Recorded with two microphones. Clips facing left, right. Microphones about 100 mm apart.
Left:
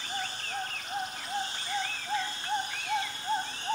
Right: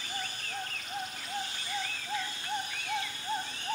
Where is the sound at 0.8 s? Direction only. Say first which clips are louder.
Left 3 dB; 45° left (ahead or behind).